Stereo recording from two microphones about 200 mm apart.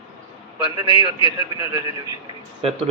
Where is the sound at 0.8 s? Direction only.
20° right (ahead or behind).